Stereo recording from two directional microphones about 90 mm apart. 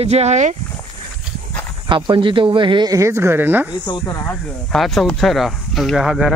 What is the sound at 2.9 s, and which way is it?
Speech, 35° right (ahead or behind).